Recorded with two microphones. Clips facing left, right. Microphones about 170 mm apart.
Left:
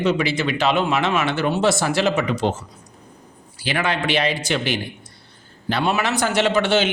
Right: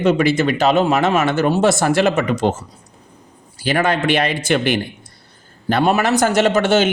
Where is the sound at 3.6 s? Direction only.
45° right (ahead or behind).